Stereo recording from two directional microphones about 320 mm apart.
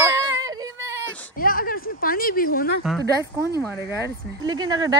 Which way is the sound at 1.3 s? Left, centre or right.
Left.